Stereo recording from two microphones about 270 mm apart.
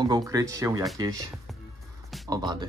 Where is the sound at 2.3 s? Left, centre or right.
Centre.